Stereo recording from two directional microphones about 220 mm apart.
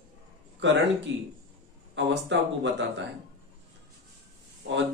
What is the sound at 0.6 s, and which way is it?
Speech, 55° right (ahead or behind).